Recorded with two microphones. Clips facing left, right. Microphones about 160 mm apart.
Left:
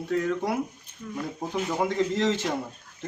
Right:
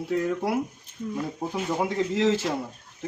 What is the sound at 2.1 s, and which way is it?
Speech, 5° right (ahead or behind).